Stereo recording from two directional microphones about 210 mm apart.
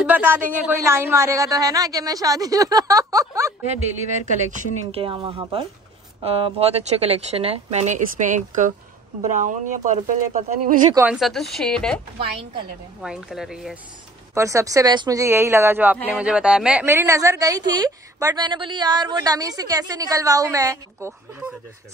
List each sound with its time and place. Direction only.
0.0 s a woman's voice: 10° right (ahead or behind)
4.5 s speech: 25° right (ahead or behind)
11.0 s speech: 5° right (ahead or behind)
13.0 s speech: centre (ahead or behind)
14.3 s a woman's voice: 15° right (ahead or behind)